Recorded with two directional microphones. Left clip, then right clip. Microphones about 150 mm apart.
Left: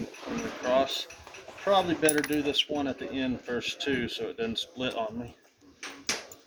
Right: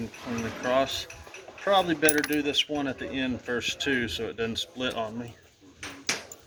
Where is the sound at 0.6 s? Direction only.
40° left (ahead or behind).